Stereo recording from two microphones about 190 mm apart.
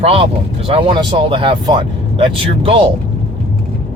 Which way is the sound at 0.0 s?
30° right (ahead or behind).